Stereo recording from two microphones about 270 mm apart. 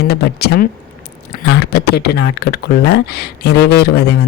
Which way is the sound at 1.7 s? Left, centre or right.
Left.